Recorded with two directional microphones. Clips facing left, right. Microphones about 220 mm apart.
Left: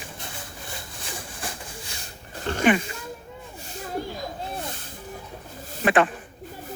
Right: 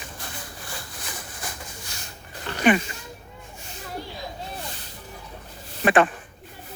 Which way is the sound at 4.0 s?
45° left (ahead or behind).